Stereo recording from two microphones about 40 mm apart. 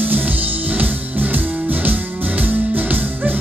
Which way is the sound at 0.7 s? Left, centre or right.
Right.